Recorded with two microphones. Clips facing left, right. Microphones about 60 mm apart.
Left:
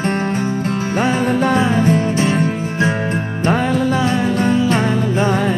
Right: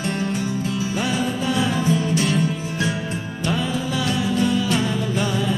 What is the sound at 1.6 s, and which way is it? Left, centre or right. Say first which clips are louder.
Music: left 6 dB; left.